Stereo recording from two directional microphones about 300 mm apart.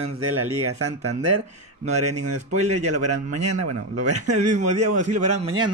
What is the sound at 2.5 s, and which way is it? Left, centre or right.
Speech, right.